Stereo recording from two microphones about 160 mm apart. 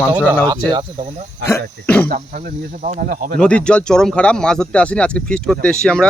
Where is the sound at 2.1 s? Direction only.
65° right (ahead or behind).